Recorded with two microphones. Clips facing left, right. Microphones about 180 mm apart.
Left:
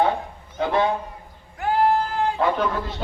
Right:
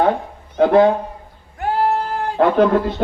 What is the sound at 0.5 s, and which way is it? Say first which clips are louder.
Speech: right 9 dB; 55° right (ahead or behind).